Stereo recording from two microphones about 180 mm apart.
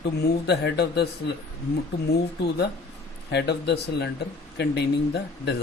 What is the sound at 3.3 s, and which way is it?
Speech, 65° left (ahead or behind).